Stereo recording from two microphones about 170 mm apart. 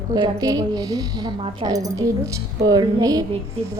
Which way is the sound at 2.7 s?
20° right (ahead or behind).